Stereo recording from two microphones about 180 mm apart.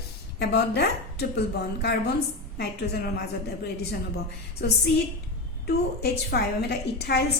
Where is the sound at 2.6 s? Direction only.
60° left (ahead or behind).